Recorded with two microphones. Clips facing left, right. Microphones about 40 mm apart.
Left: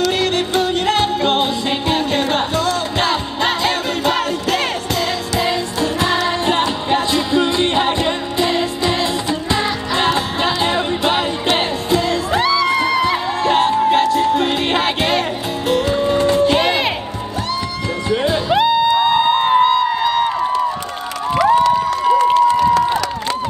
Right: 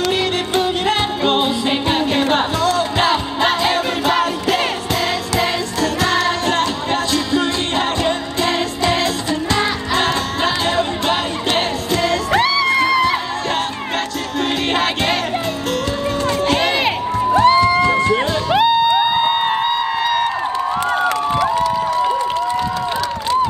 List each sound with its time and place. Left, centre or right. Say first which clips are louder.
0.2 s music: left 1 dB; centre
5.4 s music: left 2 dB; centre
9.9 s music: left 2 dB; centre
12.4 s music: even; centre
13.5 s music: left 11 dB; centre
15.7 s music: left 7 dB; centre
16.4 s music: left 1 dB; centre
17.4 s music: right 11 dB; right
18.5 s music: right 1 dB; centre